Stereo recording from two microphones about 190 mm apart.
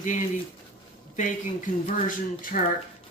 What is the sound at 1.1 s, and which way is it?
Speech, 40° left (ahead or behind).